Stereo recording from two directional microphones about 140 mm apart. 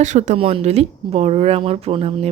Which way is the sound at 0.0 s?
60° right (ahead or behind).